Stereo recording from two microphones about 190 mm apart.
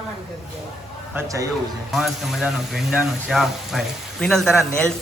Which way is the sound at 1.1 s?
15° right (ahead or behind).